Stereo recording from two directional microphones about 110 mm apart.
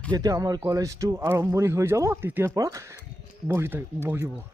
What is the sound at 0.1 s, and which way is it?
A man's voice, 35° right (ahead or behind).